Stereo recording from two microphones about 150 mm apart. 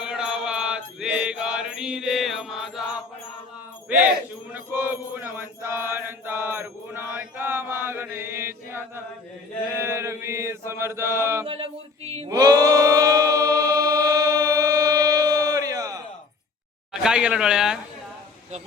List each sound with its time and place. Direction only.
0.0 s mantra: 5° right (ahead or behind)
3.8 s chant: 10° right (ahead or behind)
4.5 s mantra: 15° right (ahead or behind)
9.7 s chant: 15° right (ahead or behind)
11.4 s male singing: 40° right (ahead or behind)
12.3 s choir: 25° right (ahead or behind)
17.0 s speech: 5° right (ahead or behind)